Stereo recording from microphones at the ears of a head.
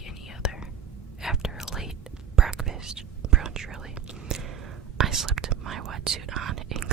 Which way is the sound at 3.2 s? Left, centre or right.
Right.